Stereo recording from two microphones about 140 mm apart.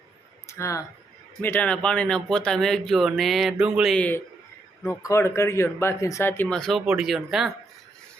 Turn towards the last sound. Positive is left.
turn(degrees=0)  # may be behind; listen again after turning